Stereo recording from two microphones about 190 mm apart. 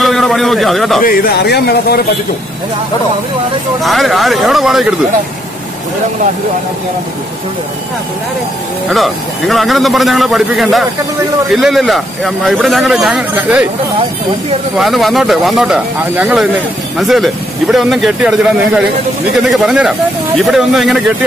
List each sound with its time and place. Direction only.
0.0 s a man's voice: centre (ahead or behind)
1.0 s speech: 50° left (ahead or behind)
3.8 s speech: centre (ahead or behind)
8.9 s speech: centre (ahead or behind)
14.8 s speech: centre (ahead or behind)